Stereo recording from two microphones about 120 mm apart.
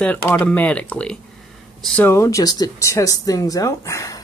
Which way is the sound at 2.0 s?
25° left (ahead or behind).